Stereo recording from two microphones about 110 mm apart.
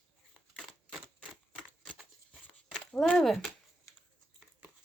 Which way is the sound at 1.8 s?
10° right (ahead or behind).